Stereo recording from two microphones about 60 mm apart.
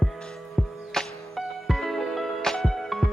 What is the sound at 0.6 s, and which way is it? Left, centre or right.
Music, centre.